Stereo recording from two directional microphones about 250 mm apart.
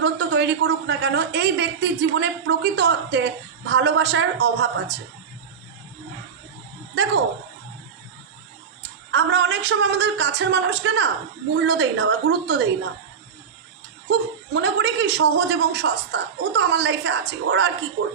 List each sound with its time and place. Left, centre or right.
0.0 s a woman's voice: right
6.9 s a woman's voice: right
9.1 s a woman's voice: right
14.1 s a woman's voice: right